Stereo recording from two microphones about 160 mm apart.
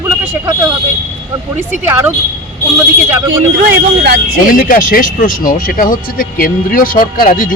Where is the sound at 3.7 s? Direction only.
90° right.